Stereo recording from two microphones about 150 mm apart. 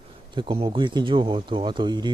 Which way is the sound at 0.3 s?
35° right (ahead or behind).